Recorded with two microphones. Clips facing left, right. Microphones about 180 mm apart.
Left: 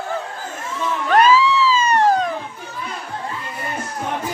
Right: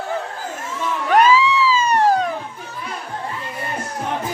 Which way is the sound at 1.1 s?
15° right (ahead or behind).